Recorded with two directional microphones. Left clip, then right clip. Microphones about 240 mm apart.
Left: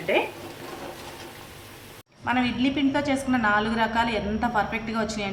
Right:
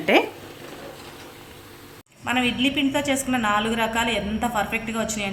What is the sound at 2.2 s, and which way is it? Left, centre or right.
A woman's voice, right.